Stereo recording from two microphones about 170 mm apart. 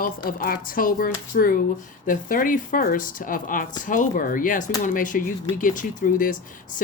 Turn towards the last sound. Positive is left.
turn(degrees=50)  # may be behind; listen again after turning